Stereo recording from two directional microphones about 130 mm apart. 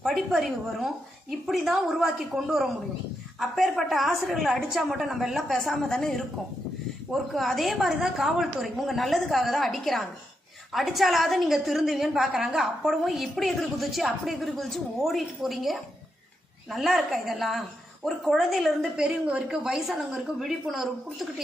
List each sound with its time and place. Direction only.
0.0 s a woman's voice: centre (ahead or behind)